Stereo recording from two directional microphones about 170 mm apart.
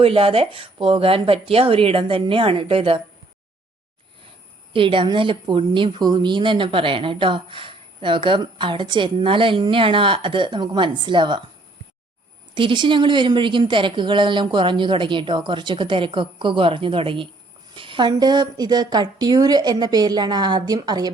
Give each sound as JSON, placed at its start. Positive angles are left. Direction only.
{"t": 0.0, "sound": "speech", "side_deg": -35}
{"t": 4.7, "sound": "a woman's voice", "side_deg": -30}
{"t": 12.5, "sound": "a woman's voice", "side_deg": -30}